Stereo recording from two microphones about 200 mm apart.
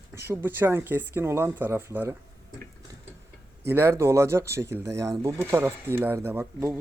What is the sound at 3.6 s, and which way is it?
Speech, 15° right (ahead or behind).